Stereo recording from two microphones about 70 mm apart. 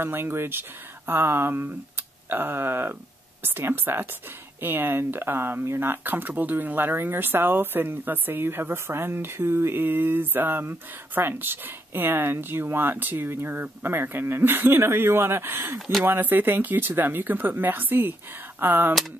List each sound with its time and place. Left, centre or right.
0.0 s speech: right